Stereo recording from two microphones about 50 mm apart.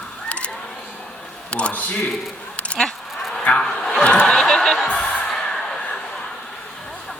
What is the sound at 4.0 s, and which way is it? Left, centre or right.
Snicker, left.